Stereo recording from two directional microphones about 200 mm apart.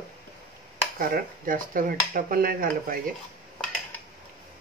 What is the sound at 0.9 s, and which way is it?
Speech, 45° right (ahead or behind).